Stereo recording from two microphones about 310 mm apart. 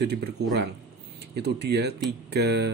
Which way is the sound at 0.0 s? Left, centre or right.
Right.